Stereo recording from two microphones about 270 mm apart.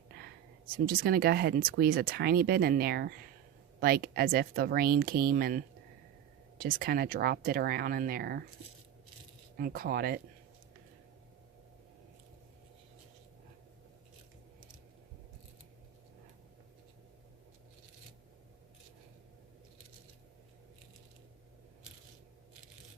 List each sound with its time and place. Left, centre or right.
0.9 s speech: right
9.6 s speech: right